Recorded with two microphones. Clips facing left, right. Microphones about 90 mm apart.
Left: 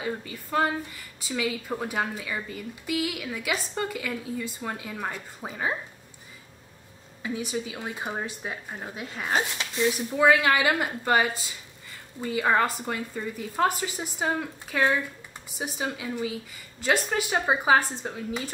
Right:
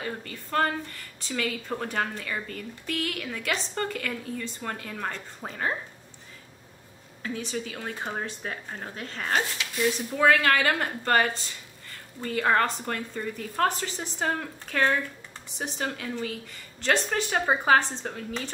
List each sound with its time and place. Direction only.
0.0 s a woman's voice: 10° left (ahead or behind)
7.2 s a woman's voice: 10° left (ahead or behind)